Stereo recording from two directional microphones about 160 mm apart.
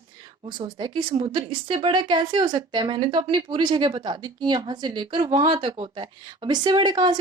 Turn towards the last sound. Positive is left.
turn(degrees=-25)  # may be behind; listen again after turning